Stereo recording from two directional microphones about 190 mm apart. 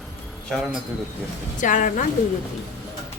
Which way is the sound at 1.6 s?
40° left (ahead or behind).